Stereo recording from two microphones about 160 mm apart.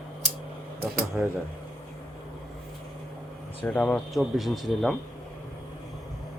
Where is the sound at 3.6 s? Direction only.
10° left (ahead or behind).